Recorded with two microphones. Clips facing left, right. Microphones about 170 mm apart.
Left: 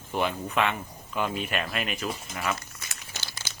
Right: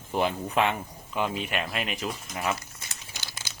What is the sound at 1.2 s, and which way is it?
Speech, 20° right (ahead or behind).